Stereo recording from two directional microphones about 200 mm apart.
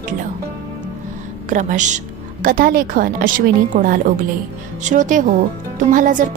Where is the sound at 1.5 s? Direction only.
40° right (ahead or behind).